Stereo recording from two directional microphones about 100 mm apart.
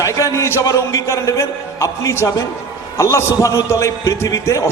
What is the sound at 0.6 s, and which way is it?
A man's voice, 35° left (ahead or behind).